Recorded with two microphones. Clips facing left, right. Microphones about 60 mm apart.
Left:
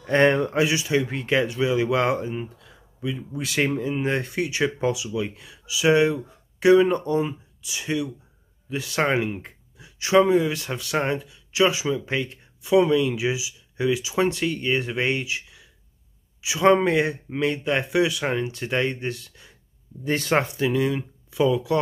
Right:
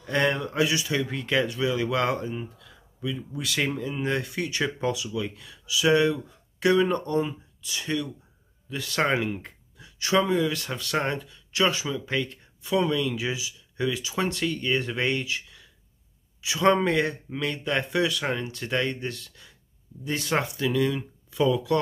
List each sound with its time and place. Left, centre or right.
0.0 s speech: left
20.1 s speech: left
20.3 s speech: left